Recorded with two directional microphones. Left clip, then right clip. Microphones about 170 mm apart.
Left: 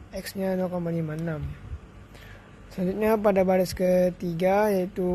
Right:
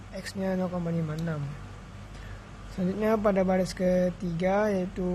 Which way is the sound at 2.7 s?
30° left (ahead or behind).